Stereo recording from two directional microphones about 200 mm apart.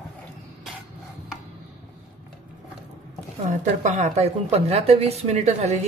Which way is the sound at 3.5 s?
40° right (ahead or behind).